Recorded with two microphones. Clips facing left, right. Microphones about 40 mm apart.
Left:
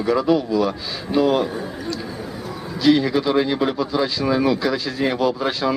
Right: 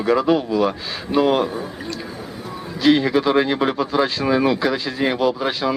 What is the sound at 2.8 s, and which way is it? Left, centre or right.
Speech, right.